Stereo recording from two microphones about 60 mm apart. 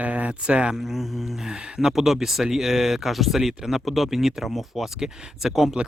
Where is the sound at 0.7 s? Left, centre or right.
Centre.